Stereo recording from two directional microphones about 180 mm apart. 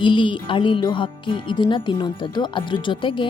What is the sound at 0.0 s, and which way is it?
Speech, 25° left (ahead or behind).